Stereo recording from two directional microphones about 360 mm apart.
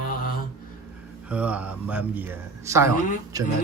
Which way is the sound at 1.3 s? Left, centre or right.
Centre.